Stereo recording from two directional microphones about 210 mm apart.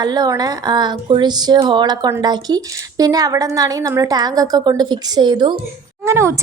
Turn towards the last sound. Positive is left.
turn(degrees=-15)  # may be behind; listen again after turning